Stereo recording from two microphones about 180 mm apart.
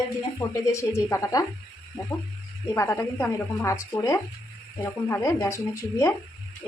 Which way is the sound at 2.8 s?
15° left (ahead or behind).